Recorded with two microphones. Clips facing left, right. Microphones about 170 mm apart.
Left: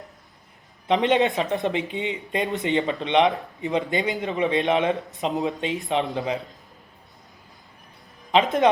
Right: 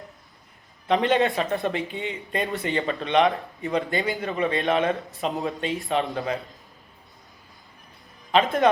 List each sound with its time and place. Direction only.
0.9 s a man's voice: 20° left (ahead or behind)
8.3 s speech: 20° left (ahead or behind)